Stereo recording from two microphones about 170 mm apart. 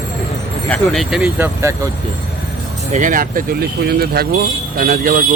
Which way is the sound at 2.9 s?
50° right (ahead or behind).